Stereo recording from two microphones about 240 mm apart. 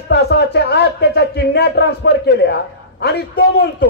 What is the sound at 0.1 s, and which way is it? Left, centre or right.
Speech, left.